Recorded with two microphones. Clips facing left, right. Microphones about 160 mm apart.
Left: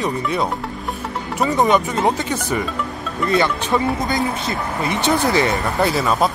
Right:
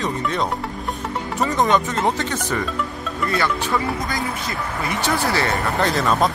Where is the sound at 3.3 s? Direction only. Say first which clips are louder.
Left 4 dB; 25° left (ahead or behind).